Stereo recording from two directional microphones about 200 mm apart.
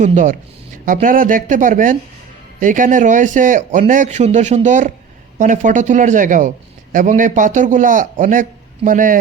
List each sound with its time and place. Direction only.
0.0 s speech: 40° right (ahead or behind)